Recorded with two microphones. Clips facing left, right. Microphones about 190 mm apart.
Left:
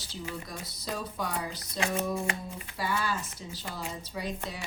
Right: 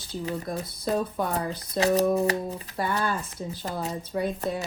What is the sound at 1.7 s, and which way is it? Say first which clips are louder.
Speech: right 9 dB; 40° right (ahead or behind).